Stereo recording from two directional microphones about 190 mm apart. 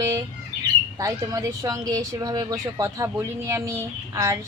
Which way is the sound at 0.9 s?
15° right (ahead or behind).